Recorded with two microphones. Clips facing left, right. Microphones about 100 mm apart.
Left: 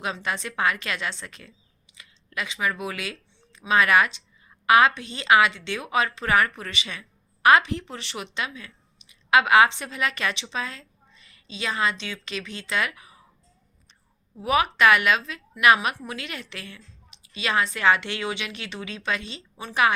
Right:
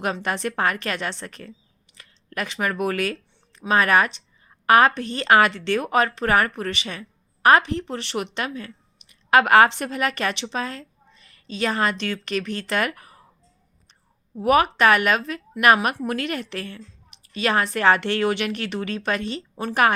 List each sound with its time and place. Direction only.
0.0 s a woman's voice: 50° right (ahead or behind)
14.4 s a woman's voice: 45° right (ahead or behind)